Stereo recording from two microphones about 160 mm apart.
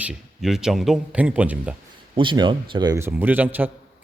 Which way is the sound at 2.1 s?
30° right (ahead or behind).